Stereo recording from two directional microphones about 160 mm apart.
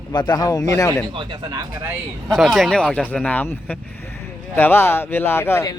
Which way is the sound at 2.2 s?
Centre (ahead or behind).